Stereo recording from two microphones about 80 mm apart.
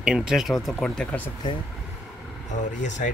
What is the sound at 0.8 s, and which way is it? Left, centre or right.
Speech, centre.